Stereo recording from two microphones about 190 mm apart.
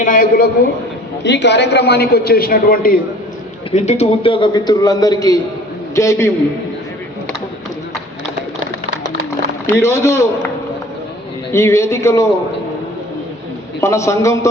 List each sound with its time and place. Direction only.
0.0 s a man's voice: 45° left (ahead or behind)
1.2 s a man's voice: 65° left (ahead or behind); by 3.0 s 50° left (ahead or behind)
3.7 s a man's voice: 35° left (ahead or behind); by 6.3 s 15° left (ahead or behind)
9.6 s a man's voice: 15° left (ahead or behind)
11.5 s a man's voice: 15° left (ahead or behind)
13.8 s a man's voice: 15° left (ahead or behind)